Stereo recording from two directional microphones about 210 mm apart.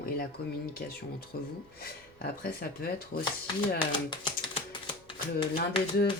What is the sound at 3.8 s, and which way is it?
Speech, 20° left (ahead or behind).